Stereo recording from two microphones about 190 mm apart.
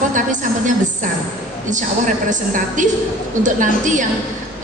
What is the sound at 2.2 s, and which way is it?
A woman's voice, 40° right (ahead or behind).